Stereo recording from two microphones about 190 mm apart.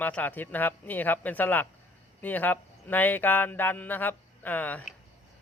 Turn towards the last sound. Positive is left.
turn(degrees=10)  # may be behind; listen again after turning